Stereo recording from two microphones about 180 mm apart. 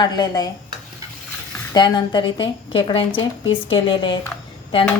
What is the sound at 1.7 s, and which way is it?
A woman's voice, 25° left (ahead or behind).